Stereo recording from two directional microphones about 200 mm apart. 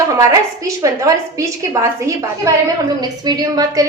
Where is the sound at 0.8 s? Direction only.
15° right (ahead or behind).